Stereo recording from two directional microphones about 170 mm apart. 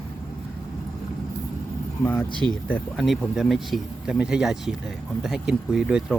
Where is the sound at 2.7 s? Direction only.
Centre (ahead or behind).